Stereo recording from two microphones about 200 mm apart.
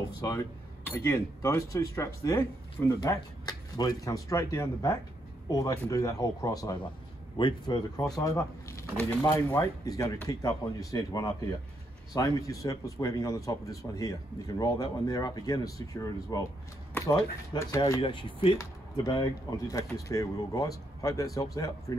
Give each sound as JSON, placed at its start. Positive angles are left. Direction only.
{"t": 0.3, "sound": "speech", "side_deg": 15}
{"t": 18.0, "sound": "speech", "side_deg": 25}